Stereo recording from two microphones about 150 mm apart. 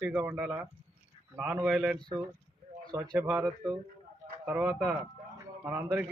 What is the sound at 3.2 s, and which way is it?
Speech, 10° right (ahead or behind).